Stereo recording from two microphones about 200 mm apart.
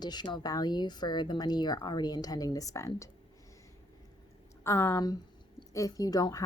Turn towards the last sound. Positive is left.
turn(degrees=20)  # may be behind; listen again after turning